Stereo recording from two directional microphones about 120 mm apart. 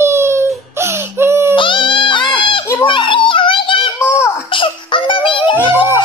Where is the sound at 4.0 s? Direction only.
20° left (ahead or behind).